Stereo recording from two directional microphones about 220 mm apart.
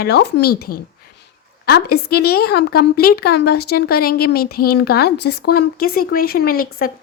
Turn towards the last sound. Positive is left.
turn(degrees=40)  # may be behind; listen again after turning